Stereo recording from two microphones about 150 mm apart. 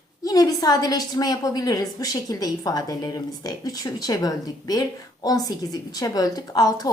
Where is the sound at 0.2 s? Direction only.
25° left (ahead or behind).